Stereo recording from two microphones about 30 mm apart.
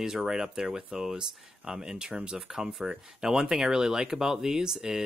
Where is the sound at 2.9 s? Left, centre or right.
Right.